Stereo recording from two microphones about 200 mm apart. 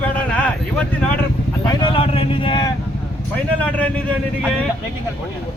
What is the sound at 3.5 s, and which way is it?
Speech, 5° left (ahead or behind).